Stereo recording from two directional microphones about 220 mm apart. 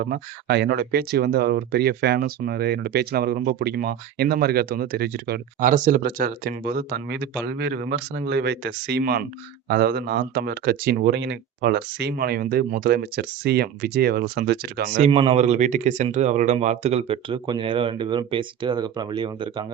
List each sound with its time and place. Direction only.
0.0 s speech: 45° right (ahead or behind)
14.9 s speech: 25° right (ahead or behind)